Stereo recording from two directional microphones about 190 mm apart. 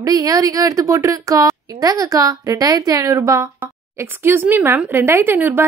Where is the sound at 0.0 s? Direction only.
20° right (ahead or behind).